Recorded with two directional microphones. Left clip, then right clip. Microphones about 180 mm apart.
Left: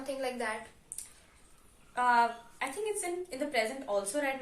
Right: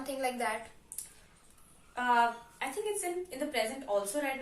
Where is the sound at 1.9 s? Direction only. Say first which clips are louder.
Left 1 dB; 25° left (ahead or behind).